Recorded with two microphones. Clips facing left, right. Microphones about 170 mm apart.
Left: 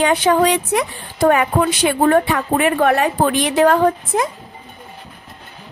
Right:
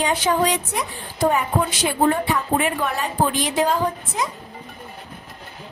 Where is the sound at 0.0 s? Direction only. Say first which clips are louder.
Left 6 dB; 65° left (ahead or behind).